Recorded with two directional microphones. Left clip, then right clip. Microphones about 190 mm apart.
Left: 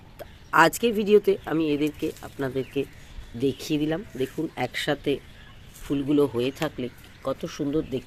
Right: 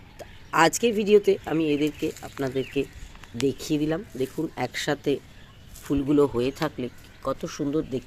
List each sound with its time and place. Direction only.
0.2 s speech: centre (ahead or behind)